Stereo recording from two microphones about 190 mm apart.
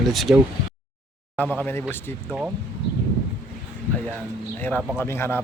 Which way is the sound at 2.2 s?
5° right (ahead or behind).